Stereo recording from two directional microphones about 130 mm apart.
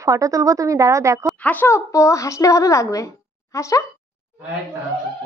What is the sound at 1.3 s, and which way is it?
Speech, 10° left (ahead or behind).